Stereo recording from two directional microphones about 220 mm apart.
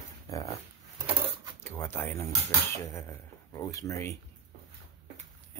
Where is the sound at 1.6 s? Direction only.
10° left (ahead or behind).